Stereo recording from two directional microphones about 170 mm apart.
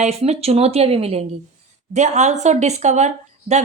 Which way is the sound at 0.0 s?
35° right (ahead or behind).